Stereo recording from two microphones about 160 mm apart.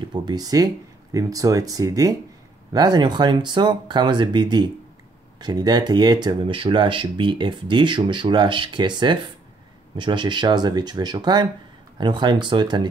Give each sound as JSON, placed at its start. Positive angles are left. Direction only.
{"t": 0.1, "sound": "speech", "side_deg": -25}